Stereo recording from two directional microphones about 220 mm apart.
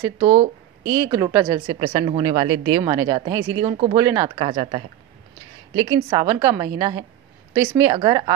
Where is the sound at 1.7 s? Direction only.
25° right (ahead or behind).